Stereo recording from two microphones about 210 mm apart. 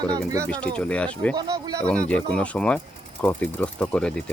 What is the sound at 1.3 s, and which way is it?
Speech, 15° right (ahead or behind).